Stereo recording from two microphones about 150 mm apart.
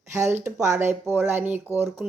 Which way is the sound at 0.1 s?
20° right (ahead or behind).